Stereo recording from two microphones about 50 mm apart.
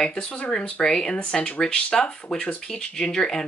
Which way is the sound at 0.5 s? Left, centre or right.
Centre.